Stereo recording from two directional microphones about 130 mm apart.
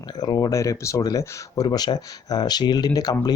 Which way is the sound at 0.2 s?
30° left (ahead or behind).